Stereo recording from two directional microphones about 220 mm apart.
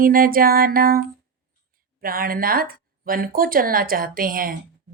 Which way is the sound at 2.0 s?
40° right (ahead or behind).